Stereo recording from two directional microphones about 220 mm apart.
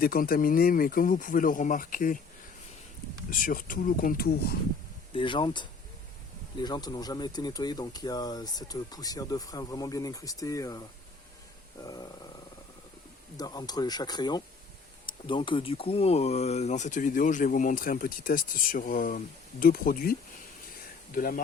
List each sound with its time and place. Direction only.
0.0 s speech: 40° left (ahead or behind)
3.2 s speech: 40° left (ahead or behind)
5.1 s speech: 20° left (ahead or behind)
13.3 s speech: 20° left (ahead or behind); by 21.4 s 40° left (ahead or behind)